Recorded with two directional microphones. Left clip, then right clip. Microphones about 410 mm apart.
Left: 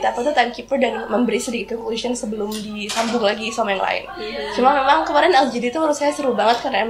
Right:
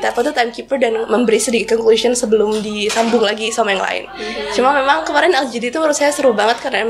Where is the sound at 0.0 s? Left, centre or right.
Right.